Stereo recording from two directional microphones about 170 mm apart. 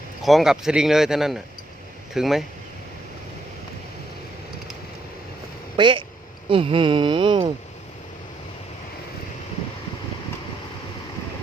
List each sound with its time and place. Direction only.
0.2 s speech: centre (ahead or behind)
5.7 s speech: 30° right (ahead or behind)